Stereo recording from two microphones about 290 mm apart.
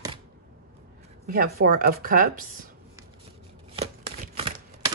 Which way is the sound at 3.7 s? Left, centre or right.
Right.